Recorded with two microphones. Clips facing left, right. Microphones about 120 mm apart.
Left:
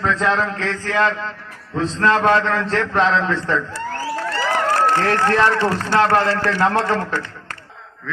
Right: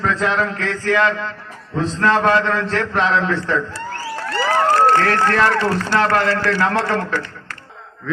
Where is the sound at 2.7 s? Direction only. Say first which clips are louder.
Left 1 dB; 30° left (ahead or behind).